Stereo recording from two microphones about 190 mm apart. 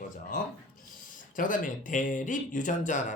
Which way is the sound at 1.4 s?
45° left (ahead or behind).